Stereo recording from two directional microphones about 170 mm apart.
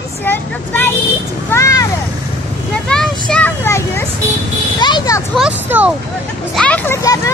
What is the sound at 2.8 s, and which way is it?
Speech, 5° left (ahead or behind).